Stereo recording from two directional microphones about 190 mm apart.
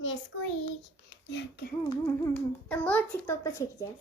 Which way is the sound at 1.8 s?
15° left (ahead or behind).